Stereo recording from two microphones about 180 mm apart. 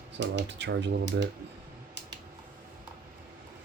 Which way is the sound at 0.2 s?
75° right (ahead or behind).